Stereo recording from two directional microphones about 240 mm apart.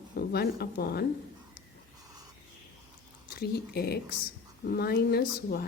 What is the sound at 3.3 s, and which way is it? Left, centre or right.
Speech, left.